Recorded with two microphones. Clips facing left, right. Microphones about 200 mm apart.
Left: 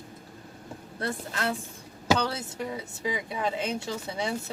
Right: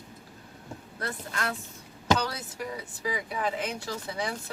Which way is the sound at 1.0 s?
25° left (ahead or behind).